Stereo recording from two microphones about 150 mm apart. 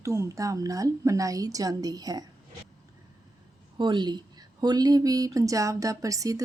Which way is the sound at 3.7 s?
30° right (ahead or behind).